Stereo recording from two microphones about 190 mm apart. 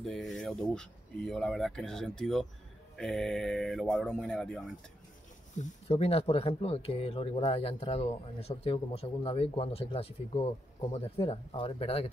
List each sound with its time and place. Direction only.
0.0 s speech: centre (ahead or behind)
5.6 s speech: 30° left (ahead or behind)